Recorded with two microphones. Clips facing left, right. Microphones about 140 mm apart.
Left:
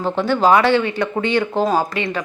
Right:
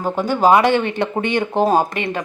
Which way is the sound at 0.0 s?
10° right (ahead or behind).